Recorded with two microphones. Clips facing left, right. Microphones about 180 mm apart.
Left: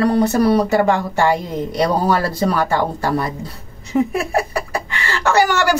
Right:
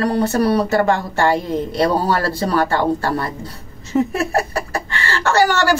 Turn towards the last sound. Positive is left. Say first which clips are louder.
# even
turn(degrees=15)  # may be behind; listen again after turning